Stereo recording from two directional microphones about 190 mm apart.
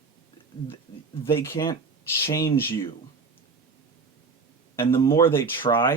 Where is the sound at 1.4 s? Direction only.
15° left (ahead or behind).